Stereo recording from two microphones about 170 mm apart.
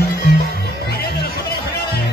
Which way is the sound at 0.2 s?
65° left (ahead or behind).